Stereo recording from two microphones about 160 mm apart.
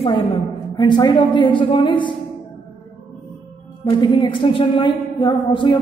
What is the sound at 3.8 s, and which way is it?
A woman's voice, 30° left (ahead or behind).